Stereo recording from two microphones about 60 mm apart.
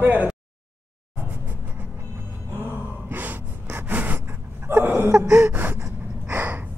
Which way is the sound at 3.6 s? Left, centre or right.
Right.